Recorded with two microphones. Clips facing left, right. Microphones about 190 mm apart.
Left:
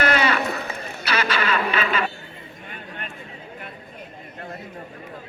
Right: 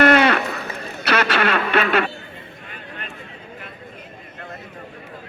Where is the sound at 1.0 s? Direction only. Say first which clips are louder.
Right 4 dB; 60° right (ahead or behind).